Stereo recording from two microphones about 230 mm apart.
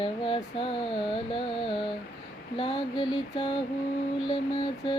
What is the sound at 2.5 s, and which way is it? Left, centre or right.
Speech, left.